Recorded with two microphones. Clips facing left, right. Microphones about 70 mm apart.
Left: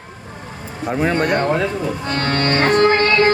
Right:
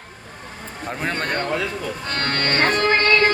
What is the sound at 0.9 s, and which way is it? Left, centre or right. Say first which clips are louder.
Speech: left 8 dB; centre.